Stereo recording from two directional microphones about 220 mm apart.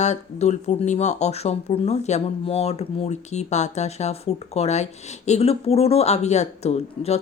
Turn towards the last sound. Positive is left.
turn(degrees=30)  # may be behind; listen again after turning